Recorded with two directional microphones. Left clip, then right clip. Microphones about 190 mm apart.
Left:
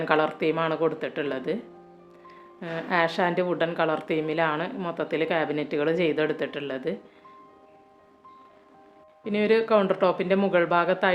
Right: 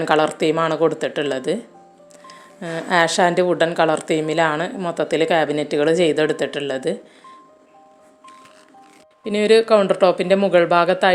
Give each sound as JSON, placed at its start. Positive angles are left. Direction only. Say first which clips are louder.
{"t": 0.0, "sound": "speech", "louder": "right 6 dB", "side_deg": -30}
{"t": 9.2, "sound": "speech", "louder": "right 8 dB", "side_deg": -25}